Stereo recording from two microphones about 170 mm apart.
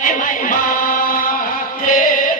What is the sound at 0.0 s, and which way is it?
Music, 50° left (ahead or behind).